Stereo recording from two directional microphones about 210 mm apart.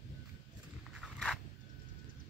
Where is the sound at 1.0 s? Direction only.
Centre (ahead or behind).